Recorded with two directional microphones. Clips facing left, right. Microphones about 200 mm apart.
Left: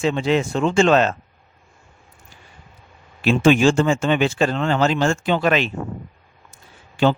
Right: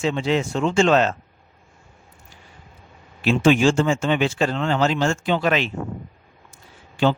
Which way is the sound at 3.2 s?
55° left (ahead or behind).